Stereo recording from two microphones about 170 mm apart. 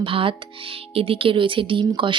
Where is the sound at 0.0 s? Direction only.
30° right (ahead or behind).